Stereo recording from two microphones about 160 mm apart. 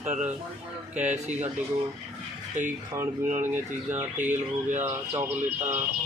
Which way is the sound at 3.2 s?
50° right (ahead or behind).